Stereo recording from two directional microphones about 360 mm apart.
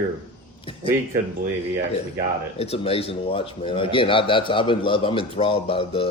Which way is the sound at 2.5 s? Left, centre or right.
Centre.